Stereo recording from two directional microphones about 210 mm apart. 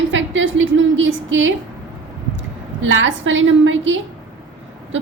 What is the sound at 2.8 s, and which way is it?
A woman's voice, 65° right (ahead or behind).